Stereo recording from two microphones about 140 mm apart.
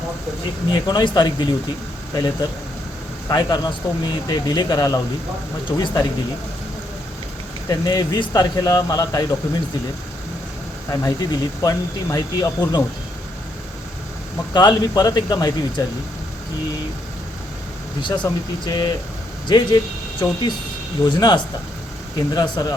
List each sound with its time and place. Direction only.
0.7 s a man's voice: 35° left (ahead or behind)
7.7 s a man's voice: 30° left (ahead or behind)
11.0 s a man's voice: 30° left (ahead or behind)
14.5 s a man's voice: 30° left (ahead or behind)
18.0 s a man's voice: 35° left (ahead or behind)